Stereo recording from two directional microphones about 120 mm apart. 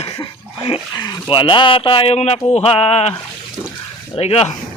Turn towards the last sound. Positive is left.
turn(degrees=60)  # may be behind; listen again after turning